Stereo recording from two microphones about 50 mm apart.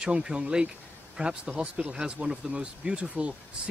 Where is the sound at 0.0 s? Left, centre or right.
Centre.